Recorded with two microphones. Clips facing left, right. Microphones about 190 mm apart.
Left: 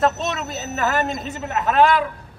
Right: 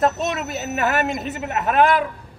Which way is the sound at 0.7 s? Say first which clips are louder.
Even; 15° right (ahead or behind).